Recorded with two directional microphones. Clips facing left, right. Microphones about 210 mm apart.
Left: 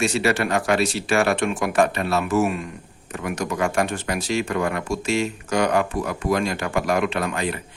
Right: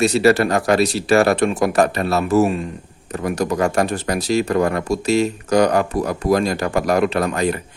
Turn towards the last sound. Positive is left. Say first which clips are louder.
# right 6 dB
turn(degrees=-40)  # may be behind; listen again after turning